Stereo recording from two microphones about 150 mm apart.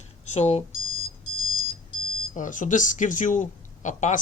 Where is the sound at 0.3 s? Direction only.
45° left (ahead or behind).